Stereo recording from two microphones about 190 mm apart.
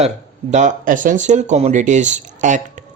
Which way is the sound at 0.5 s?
40° right (ahead or behind).